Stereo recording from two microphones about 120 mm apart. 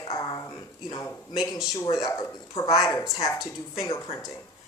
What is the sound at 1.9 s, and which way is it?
Speech, 30° left (ahead or behind).